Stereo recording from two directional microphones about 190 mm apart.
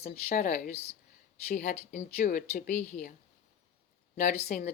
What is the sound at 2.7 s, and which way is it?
Speech, 10° left (ahead or behind).